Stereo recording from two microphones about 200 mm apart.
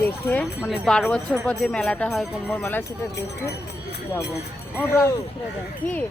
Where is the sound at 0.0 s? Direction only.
10° left (ahead or behind).